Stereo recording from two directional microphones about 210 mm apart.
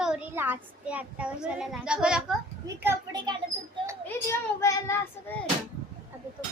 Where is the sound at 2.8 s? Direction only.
15° right (ahead or behind).